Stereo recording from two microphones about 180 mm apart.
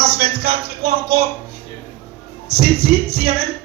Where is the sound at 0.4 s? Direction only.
60° right (ahead or behind).